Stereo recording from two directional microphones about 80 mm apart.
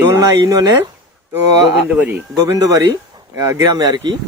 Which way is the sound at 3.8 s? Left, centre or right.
Right.